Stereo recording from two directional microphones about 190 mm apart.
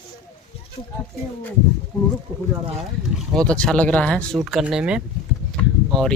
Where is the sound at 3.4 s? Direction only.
5° left (ahead or behind).